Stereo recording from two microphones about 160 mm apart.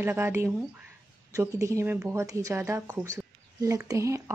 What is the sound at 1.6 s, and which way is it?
Speech, 20° right (ahead or behind).